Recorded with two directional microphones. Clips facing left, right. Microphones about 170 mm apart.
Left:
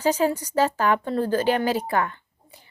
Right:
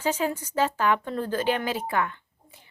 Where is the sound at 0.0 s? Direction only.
40° left (ahead or behind).